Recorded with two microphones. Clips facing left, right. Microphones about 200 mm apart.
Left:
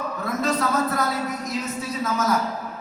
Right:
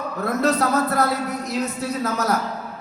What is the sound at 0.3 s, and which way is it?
Speech, 65° right (ahead or behind).